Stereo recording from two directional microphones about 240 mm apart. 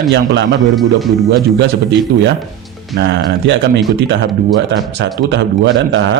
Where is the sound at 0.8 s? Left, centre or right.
Centre.